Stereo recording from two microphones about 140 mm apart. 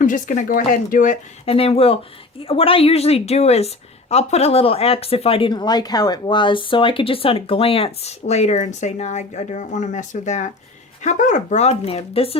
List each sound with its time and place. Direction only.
0.0 s speech: 65° left (ahead or behind)
1.5 s speech: 45° left (ahead or behind)